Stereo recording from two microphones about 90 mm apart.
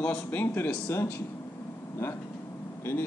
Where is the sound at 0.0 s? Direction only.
15° left (ahead or behind).